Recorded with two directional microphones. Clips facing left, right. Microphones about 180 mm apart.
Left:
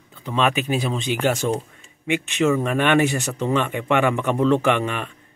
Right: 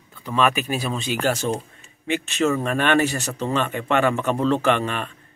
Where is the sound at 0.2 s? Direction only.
20° left (ahead or behind).